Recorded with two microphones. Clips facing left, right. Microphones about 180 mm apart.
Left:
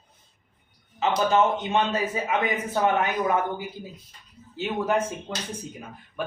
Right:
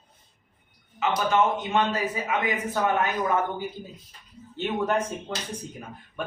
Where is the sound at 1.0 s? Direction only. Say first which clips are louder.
Left 2 dB; 25° left (ahead or behind).